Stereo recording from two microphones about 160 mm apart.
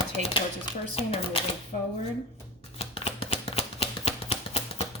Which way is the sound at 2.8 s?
35° left (ahead or behind).